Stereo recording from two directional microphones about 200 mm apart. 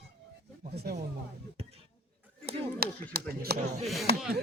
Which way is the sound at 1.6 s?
30° right (ahead or behind).